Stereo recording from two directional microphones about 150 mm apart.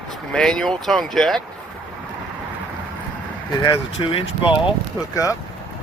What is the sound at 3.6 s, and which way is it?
Speech, 35° left (ahead or behind).